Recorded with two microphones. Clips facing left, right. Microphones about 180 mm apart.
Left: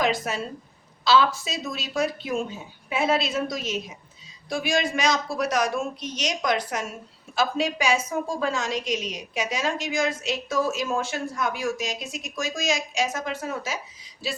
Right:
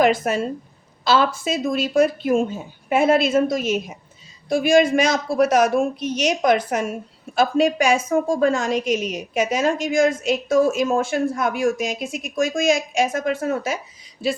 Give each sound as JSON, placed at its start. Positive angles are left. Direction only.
{"t": 0.0, "sound": "a woman's voice", "side_deg": -55}